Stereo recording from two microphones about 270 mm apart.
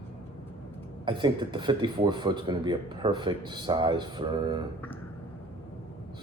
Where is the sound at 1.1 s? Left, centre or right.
Centre.